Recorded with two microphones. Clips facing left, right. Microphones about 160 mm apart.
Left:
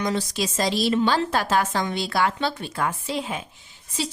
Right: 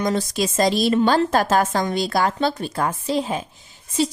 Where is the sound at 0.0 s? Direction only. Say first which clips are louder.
Right 4 dB; 45° right (ahead or behind).